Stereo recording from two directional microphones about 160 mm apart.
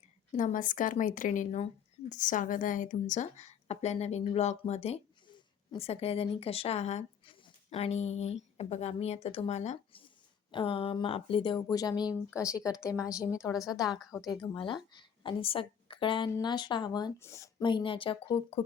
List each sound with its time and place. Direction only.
0.3 s a woman's voice: 55° left (ahead or behind); by 12.7 s 20° left (ahead or behind)
13.3 s a woman's voice: 5° right (ahead or behind)
14.6 s a woman's voice: 30° left (ahead or behind)
17.6 s speech: 30° left (ahead or behind)